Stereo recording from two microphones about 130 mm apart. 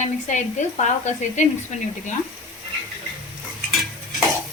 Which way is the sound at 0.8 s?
65° left (ahead or behind).